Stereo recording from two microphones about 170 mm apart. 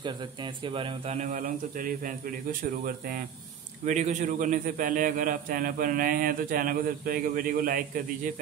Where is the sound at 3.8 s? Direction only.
45° right (ahead or behind).